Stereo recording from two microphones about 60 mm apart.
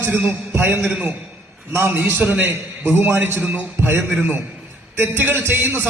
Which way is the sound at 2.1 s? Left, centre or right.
Right.